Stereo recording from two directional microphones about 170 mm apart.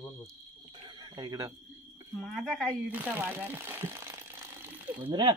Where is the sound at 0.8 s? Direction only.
25° right (ahead or behind).